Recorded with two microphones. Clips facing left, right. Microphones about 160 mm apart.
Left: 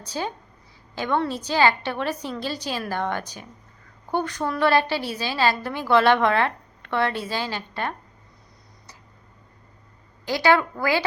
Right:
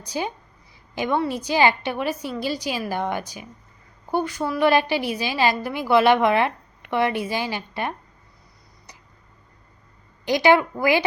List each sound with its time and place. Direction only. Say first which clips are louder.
0.0 s a woman's voice: right 2 dB; 10° right (ahead or behind)
10.2 s a woman's voice: right 3 dB; 15° right (ahead or behind)